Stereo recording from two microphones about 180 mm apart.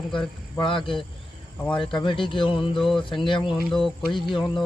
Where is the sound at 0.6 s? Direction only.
25° left (ahead or behind).